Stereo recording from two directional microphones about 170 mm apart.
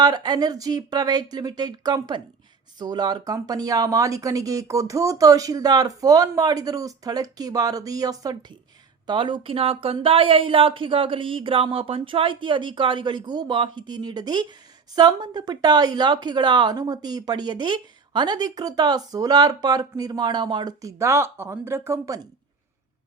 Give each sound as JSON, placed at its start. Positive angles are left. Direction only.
{"t": 0.0, "sound": "speech", "side_deg": -25}